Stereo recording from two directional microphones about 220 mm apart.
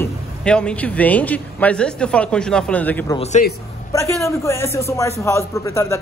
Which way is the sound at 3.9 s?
15° left (ahead or behind).